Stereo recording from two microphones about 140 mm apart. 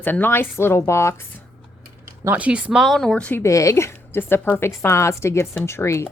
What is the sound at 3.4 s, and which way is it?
Speech, 20° left (ahead or behind).